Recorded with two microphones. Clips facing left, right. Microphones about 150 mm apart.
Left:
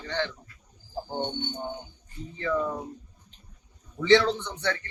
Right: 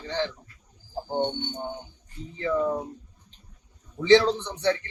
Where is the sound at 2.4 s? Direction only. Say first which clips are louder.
Right 3 dB; 25° right (ahead or behind).